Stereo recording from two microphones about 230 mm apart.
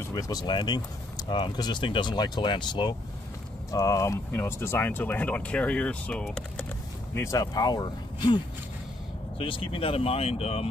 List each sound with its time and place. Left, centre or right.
0.0 s speech: centre
9.4 s speech: left